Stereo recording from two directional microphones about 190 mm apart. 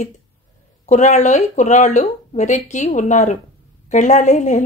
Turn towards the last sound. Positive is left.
turn(degrees=40)  # may be behind; listen again after turning